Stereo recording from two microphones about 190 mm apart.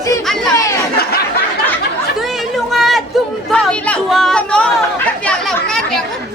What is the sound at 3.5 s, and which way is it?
Chatter, 5° left (ahead or behind).